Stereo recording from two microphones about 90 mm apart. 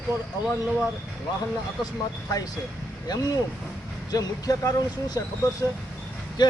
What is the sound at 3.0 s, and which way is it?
Speech, 45° left (ahead or behind).